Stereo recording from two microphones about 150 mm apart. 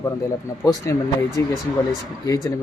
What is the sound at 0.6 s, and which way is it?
Speech, 20° left (ahead or behind).